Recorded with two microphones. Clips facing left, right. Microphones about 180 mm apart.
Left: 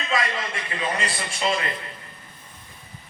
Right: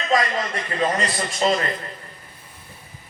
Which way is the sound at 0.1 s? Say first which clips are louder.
Right 5 dB; 40° right (ahead or behind).